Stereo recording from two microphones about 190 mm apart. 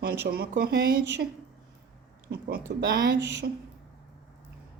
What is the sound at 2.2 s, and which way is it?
Speech, 60° right (ahead or behind).